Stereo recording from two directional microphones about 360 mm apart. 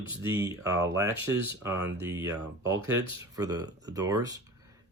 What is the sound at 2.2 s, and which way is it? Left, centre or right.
Speech, centre.